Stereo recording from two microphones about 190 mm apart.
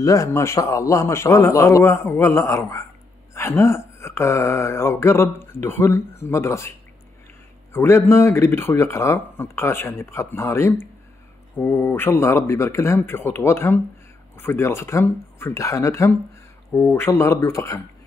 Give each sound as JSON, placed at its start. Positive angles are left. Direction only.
{"t": 0.0, "sound": "speech", "side_deg": 15}
{"t": 7.7, "sound": "speech", "side_deg": 15}